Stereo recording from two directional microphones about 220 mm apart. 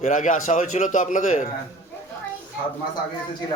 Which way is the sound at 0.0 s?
35° left (ahead or behind).